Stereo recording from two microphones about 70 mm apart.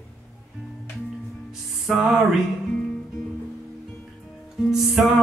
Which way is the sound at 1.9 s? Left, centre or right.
Centre.